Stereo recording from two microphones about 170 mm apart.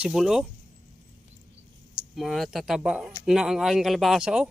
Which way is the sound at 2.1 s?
Centre (ahead or behind).